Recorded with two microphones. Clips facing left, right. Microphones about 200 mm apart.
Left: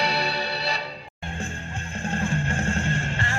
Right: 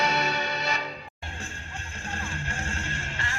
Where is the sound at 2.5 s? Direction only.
30° left (ahead or behind).